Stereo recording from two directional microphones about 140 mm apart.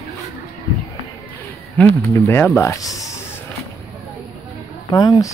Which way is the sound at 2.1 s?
15° left (ahead or behind).